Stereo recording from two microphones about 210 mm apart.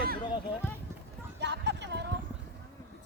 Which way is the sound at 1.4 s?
55° right (ahead or behind).